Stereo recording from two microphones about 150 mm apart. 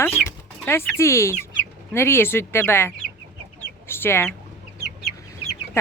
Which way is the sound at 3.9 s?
15° left (ahead or behind).